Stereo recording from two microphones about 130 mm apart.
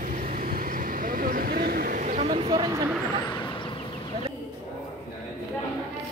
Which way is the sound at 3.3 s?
35° left (ahead or behind).